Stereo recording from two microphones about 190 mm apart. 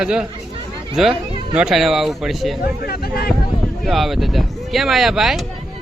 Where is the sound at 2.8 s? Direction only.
55° left (ahead or behind).